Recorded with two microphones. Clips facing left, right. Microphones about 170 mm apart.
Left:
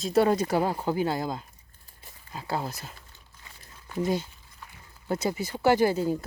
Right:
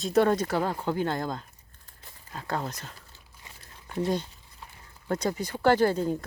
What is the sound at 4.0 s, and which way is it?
Speech, 5° left (ahead or behind).